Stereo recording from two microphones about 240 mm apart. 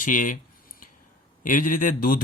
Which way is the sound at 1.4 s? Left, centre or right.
Left.